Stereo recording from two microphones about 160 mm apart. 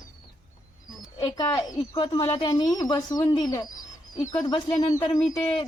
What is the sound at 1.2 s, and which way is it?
Speech, 25° left (ahead or behind).